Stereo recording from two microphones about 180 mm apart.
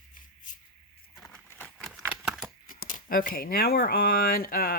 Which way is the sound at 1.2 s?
10° left (ahead or behind).